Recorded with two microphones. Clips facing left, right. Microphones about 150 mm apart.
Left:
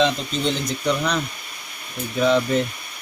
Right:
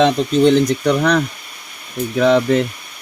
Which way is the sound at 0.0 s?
60° right (ahead or behind).